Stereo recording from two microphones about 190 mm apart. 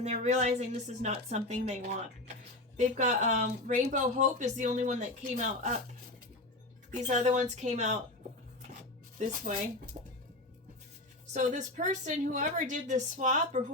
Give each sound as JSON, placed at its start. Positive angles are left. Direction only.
{"t": 0.0, "sound": "a woman's voice", "side_deg": -35}
{"t": 6.9, "sound": "a woman's voice", "side_deg": -40}
{"t": 9.1, "sound": "speech", "side_deg": -45}
{"t": 10.0, "sound": "music", "side_deg": -40}
{"t": 11.3, "sound": "a woman's voice", "side_deg": -40}